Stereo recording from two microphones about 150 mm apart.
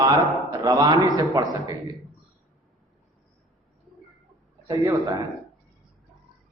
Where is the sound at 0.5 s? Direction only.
25° right (ahead or behind).